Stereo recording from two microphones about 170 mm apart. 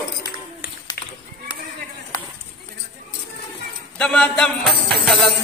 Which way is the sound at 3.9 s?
5° left (ahead or behind).